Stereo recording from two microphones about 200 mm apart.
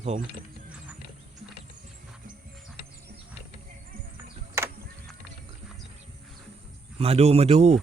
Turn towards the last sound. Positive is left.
turn(degrees=-30)  # may be behind; listen again after turning